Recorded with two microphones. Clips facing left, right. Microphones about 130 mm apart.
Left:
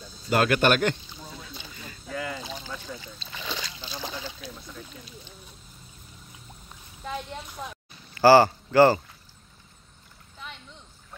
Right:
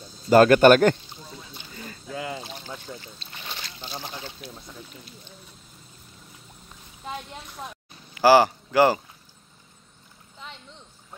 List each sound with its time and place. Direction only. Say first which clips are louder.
0.3 s speech: right 8 dB; 40° right (ahead or behind)
2.0 s boat: even; 25° right (ahead or behind)
8.1 s speech: even; 10° right (ahead or behind)